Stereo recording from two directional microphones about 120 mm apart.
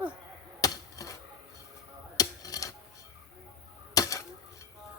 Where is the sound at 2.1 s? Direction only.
30° left (ahead or behind).